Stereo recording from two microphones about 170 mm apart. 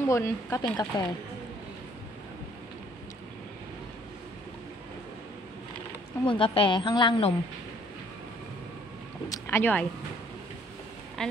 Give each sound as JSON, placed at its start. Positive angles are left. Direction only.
{"t": 0.0, "sound": "a woman's voice", "side_deg": 15}
{"t": 6.2, "sound": "a woman's voice", "side_deg": 30}
{"t": 9.3, "sound": "speech", "side_deg": 15}
{"t": 11.2, "sound": "speech", "side_deg": 5}